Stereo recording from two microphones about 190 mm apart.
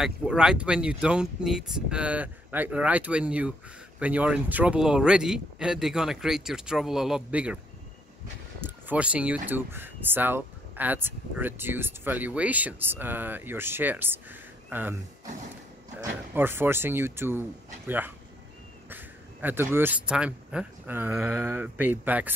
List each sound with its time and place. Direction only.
0.0 s speech: 5° right (ahead or behind)
8.5 s speech: 10° right (ahead or behind)